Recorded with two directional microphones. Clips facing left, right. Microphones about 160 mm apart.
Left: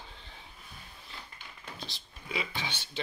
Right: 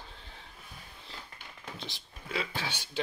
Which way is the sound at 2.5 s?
10° right (ahead or behind).